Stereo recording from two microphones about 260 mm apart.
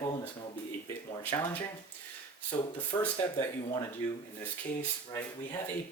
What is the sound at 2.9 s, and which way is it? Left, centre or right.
Speech, centre.